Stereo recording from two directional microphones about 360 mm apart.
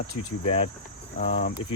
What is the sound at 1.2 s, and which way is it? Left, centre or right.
Speech, centre.